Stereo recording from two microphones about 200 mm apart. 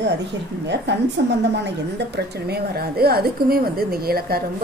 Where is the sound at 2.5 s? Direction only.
50° right (ahead or behind).